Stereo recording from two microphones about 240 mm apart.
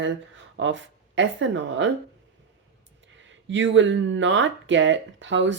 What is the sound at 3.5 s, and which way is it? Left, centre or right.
Speech, right.